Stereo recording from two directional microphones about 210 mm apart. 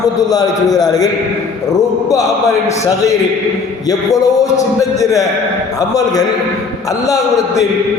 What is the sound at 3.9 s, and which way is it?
A man's voice, 15° left (ahead or behind).